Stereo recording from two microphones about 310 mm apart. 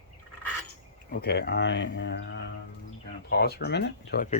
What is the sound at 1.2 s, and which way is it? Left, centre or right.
Speech, left.